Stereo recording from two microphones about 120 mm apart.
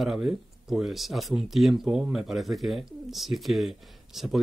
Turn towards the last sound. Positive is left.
turn(degrees=-5)  # may be behind; listen again after turning